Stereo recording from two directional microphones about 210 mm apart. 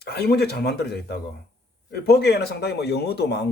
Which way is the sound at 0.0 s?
50° left (ahead or behind).